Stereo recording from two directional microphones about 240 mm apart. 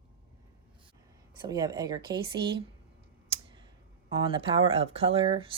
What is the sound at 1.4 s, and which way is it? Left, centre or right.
Speech, centre.